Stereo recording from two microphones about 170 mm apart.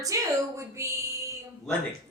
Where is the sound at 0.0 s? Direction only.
20° right (ahead or behind).